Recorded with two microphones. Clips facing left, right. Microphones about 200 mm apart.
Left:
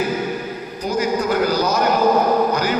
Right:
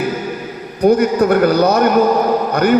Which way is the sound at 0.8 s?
60° right (ahead or behind).